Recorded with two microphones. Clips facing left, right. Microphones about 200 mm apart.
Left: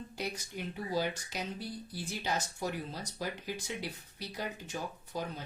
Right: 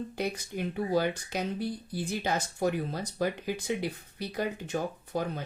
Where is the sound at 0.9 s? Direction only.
55° right (ahead or behind).